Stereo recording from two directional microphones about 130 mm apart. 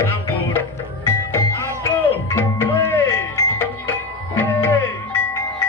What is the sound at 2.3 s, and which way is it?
Music, 15° left (ahead or behind).